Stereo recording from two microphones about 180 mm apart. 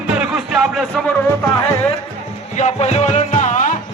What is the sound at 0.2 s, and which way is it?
Music, 5° right (ahead or behind).